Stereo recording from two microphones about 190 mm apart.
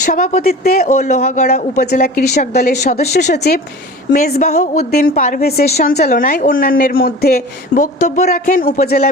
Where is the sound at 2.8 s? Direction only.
35° left (ahead or behind).